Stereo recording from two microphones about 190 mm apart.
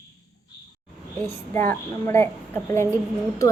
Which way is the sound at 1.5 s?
10° left (ahead or behind).